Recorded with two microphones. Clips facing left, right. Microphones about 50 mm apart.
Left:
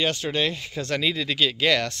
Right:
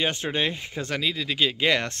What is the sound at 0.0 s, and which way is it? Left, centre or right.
Speech, right.